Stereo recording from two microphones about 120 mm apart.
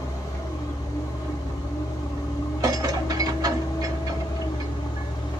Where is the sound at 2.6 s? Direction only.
30° right (ahead or behind).